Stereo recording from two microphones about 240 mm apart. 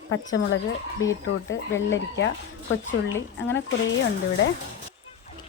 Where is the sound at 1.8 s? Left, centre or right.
Left.